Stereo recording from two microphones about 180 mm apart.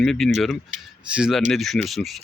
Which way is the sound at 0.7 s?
45° right (ahead or behind).